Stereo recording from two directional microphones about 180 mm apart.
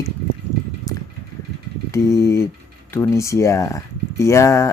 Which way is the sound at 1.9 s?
15° left (ahead or behind).